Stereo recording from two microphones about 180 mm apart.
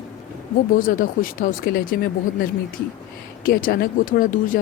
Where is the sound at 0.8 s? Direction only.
50° left (ahead or behind).